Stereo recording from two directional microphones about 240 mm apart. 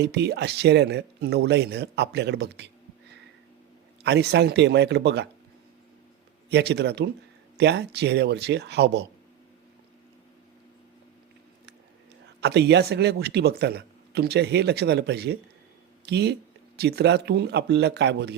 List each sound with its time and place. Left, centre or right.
0.0 s speech: right
4.0 s speech: right
6.5 s speech: right
12.4 s speech: right